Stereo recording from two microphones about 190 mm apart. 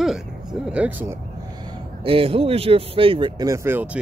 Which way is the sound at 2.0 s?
30° right (ahead or behind).